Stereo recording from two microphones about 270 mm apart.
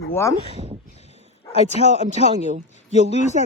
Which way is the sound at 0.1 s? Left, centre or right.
Centre.